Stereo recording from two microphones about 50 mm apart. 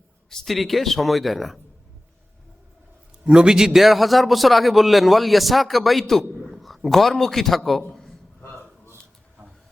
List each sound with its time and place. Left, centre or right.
0.4 s a man's voice: centre
3.2 s a man's voice: centre
8.4 s a sound: left